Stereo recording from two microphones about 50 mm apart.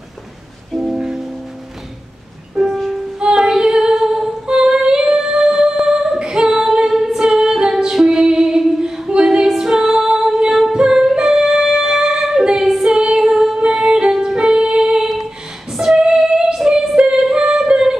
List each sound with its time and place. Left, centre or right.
0.9 s music: centre
2.6 s music: centre
3.2 s female singing: centre
9.5 s music: centre
15.7 s female singing: centre
16.0 s music: centre
16.9 s female singing: centre